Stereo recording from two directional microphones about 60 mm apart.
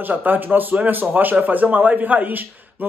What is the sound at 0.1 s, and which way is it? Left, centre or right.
A man's voice, right.